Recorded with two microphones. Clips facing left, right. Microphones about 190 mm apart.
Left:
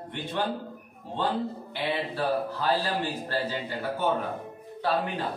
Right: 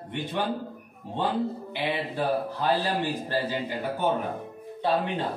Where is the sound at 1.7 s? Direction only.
15° right (ahead or behind).